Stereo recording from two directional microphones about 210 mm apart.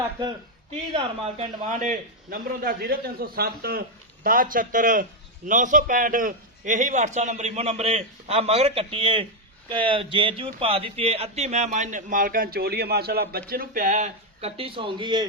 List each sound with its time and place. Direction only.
0.7 s a man's voice: 30° right (ahead or behind)